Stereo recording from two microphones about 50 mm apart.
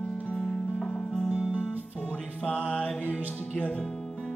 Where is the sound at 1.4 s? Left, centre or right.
Right.